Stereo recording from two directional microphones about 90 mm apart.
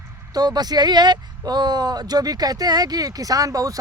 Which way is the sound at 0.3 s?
50° right (ahead or behind).